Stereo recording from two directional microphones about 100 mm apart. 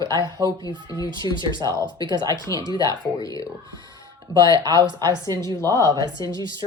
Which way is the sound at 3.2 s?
35° left (ahead or behind).